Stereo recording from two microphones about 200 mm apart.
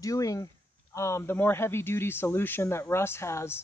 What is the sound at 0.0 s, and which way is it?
A man's voice, 15° left (ahead or behind).